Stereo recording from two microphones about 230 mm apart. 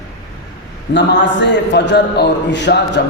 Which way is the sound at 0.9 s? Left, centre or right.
Left.